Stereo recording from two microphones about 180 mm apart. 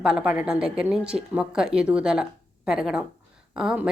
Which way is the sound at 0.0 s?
5° right (ahead or behind).